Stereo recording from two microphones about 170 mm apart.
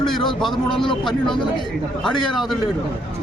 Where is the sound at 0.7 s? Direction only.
30° left (ahead or behind).